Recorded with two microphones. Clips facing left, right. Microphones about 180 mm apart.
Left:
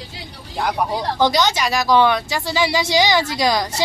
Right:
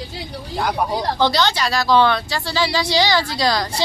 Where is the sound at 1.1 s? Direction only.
15° left (ahead or behind).